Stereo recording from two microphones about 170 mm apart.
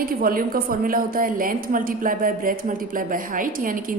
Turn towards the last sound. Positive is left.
turn(degrees=-55)  # may be behind; listen again after turning